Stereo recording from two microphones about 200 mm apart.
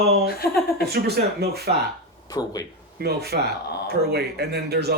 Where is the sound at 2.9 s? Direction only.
55° right (ahead or behind).